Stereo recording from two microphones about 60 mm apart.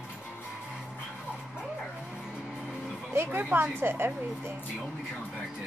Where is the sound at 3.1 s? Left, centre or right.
Right.